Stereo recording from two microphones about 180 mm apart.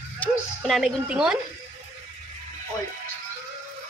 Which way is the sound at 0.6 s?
Centre (ahead or behind).